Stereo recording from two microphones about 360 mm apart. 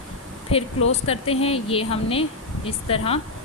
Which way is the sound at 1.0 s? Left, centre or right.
Centre.